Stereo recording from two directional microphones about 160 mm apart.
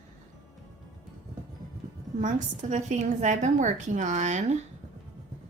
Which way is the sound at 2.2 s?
55° right (ahead or behind).